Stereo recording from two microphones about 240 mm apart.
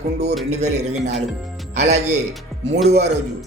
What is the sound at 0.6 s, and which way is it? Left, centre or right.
Speech, right.